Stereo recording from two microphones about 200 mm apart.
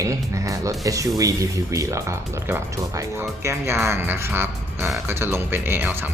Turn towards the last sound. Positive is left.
turn(degrees=-10)  # may be behind; listen again after turning